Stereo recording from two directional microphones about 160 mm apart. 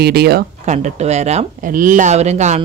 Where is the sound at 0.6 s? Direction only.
45° right (ahead or behind).